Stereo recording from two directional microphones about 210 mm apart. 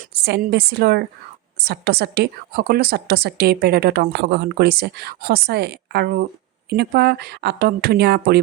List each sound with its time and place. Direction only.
0.1 s a woman's voice: 50° right (ahead or behind)